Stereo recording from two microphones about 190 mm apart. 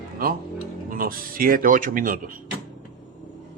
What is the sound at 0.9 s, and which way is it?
Speech, 50° right (ahead or behind).